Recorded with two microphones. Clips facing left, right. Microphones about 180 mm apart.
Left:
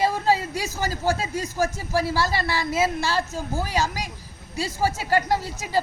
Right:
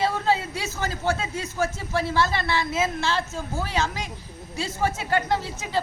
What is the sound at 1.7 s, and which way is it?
Speech, 10° left (ahead or behind).